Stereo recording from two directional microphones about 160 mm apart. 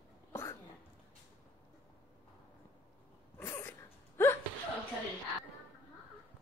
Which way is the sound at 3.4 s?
15° left (ahead or behind).